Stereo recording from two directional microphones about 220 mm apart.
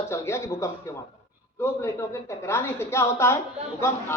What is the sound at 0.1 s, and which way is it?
A woman's voice, 10° left (ahead or behind).